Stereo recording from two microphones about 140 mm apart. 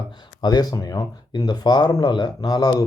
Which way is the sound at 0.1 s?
30° left (ahead or behind).